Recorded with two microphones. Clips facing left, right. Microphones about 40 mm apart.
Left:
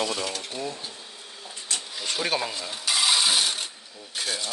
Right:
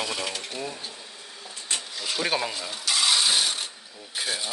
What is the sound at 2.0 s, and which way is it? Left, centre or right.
Speech, centre.